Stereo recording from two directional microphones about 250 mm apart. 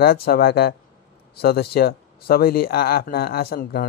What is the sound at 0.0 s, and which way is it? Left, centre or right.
Speech, left.